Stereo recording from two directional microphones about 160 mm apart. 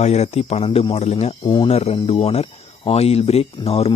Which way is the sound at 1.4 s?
30° left (ahead or behind).